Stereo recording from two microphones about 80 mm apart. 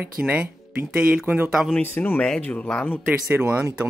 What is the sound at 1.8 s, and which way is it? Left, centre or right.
Speech, left.